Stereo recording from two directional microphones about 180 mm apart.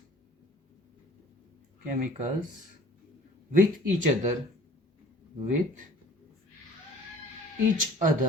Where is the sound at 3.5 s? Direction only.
45° right (ahead or behind).